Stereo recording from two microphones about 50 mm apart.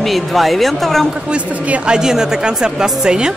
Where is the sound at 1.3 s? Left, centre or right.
Right.